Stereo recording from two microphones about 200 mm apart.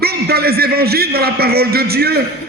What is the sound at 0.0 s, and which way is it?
A man's voice, 50° right (ahead or behind).